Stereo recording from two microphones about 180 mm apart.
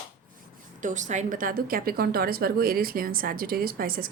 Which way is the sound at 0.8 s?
45° right (ahead or behind).